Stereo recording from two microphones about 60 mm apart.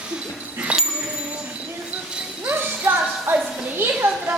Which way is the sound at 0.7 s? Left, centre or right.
Right.